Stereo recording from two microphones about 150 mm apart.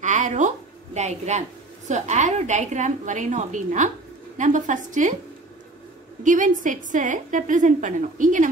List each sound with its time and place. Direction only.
0.0 s a sound: 55° right (ahead or behind)
0.9 s a woman's voice: 50° right (ahead or behind)
6.2 s a woman's voice: 60° right (ahead or behind)